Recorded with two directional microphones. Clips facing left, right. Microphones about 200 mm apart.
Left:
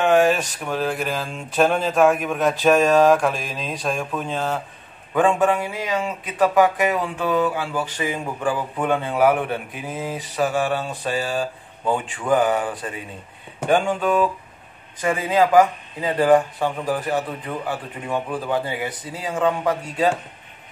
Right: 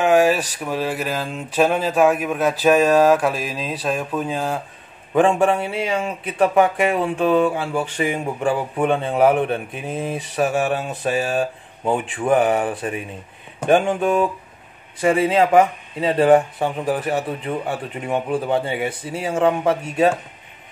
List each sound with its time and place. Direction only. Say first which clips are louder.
0.0 s speech: right 1 dB; 10° right (ahead or behind)
5.1 s speech: right 2 dB; 25° right (ahead or behind)